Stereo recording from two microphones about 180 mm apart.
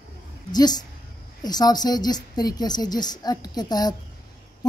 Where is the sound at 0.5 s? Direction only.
20° left (ahead or behind).